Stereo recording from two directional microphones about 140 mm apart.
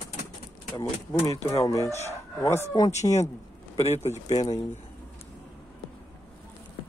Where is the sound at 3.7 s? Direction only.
50° left (ahead or behind).